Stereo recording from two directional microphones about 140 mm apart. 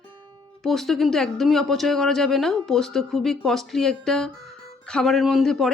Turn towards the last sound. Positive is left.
turn(degrees=0)  # may be behind; listen again after turning